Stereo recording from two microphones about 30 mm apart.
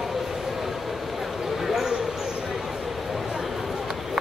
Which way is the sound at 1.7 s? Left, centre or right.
Centre.